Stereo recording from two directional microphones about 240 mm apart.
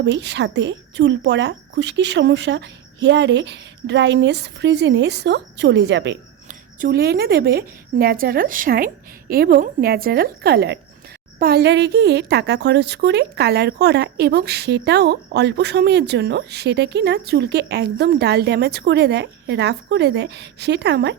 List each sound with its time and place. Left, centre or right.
0.0 s a woman's voice: right
6.5 s a woman's voice: right